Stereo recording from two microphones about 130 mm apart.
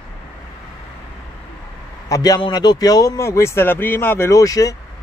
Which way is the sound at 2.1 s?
30° left (ahead or behind).